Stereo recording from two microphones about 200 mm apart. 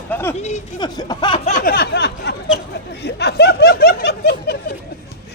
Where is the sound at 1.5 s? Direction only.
40° left (ahead or behind).